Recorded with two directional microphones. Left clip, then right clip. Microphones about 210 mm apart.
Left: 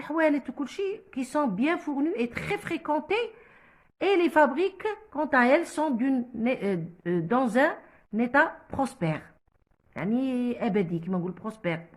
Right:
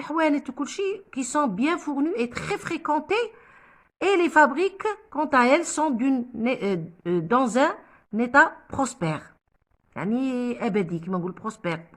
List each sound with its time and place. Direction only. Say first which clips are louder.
0.0 s a woman's voice: right 2 dB; 30° right (ahead or behind)